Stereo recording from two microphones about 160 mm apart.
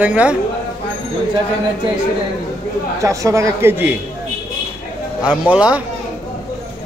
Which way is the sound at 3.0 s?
20° right (ahead or behind).